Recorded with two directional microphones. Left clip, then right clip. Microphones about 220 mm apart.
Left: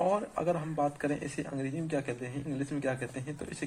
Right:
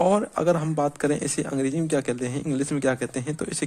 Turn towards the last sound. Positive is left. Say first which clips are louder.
# right 10 dB
turn(degrees=-55)  # may be behind; listen again after turning